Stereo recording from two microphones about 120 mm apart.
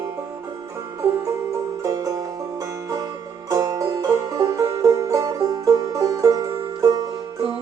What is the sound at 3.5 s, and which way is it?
Music, 30° right (ahead or behind).